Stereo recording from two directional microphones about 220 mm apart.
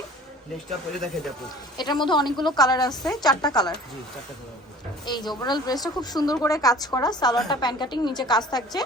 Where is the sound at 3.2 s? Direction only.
20° left (ahead or behind).